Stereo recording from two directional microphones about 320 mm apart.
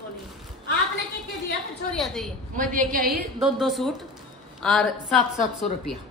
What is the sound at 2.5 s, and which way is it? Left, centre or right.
Speech, right.